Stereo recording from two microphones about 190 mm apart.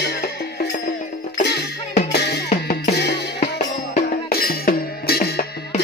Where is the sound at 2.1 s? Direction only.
60° left (ahead or behind).